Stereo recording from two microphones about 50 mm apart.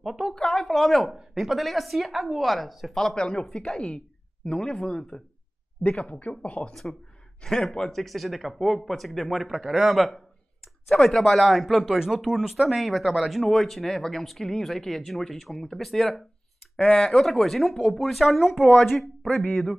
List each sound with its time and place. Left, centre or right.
0.0 s a woman's voice: centre
0.3 s a woman's voice: centre
6.0 s speech: left
6.7 s speech: centre
16.7 s speech: centre